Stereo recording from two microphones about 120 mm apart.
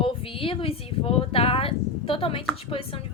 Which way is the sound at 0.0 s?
50° left (ahead or behind).